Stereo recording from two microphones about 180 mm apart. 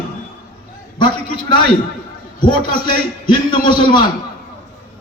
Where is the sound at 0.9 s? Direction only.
25° left (ahead or behind).